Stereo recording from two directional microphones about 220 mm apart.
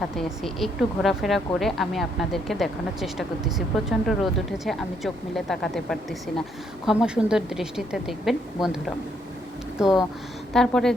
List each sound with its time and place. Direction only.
0.2 s a woman's voice: centre (ahead or behind)
9.7 s a woman's voice: centre (ahead or behind)